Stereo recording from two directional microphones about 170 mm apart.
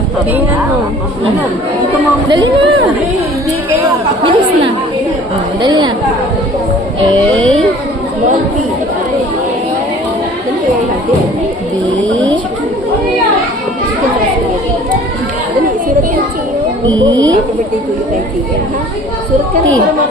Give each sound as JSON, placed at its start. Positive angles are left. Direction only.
{"t": 2.3, "sound": "speech", "side_deg": -25}
{"t": 4.2, "sound": "speech", "side_deg": -30}